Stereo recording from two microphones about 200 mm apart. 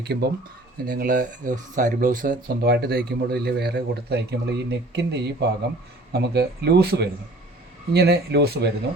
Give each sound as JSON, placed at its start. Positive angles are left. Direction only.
{"t": 0.0, "sound": "speech", "side_deg": -55}
{"t": 0.9, "sound": "speech", "side_deg": -45}